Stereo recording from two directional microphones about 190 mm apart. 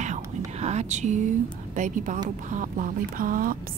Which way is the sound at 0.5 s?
35° right (ahead or behind).